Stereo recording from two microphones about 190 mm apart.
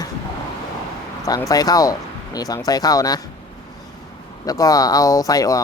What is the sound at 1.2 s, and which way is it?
Speech, 20° left (ahead or behind).